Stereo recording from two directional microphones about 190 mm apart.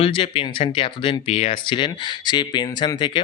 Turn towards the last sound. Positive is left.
turn(degrees=25)  # may be behind; listen again after turning